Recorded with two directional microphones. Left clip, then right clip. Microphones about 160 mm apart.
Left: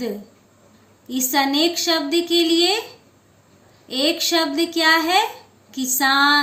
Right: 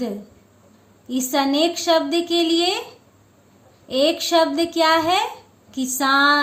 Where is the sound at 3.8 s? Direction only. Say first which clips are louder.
Right 1 dB; 65° right (ahead or behind).